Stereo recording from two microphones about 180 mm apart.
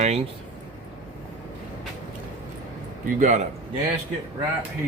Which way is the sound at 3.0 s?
45° right (ahead or behind).